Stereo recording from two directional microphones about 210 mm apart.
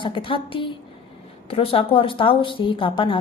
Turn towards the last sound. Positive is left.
turn(degrees=25)  # may be behind; listen again after turning